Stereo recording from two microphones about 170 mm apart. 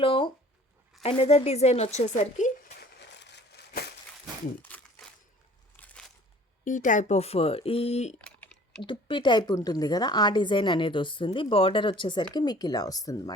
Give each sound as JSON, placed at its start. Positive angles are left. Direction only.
{"t": 0.0, "sound": "a sound", "side_deg": 30}
{"t": 1.0, "sound": "speech", "side_deg": 35}
{"t": 2.8, "sound": "a sound", "side_deg": 90}
{"t": 4.6, "sound": "crumpling", "side_deg": 10}
{"t": 5.7, "sound": "crunch", "side_deg": 10}
{"t": 6.7, "sound": "speech", "side_deg": 50}
{"t": 8.2, "sound": "typing", "side_deg": 10}
{"t": 8.8, "sound": "a woman's voice", "side_deg": 30}